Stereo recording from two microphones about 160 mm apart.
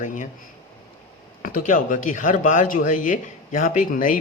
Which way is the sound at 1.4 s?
55° left (ahead or behind).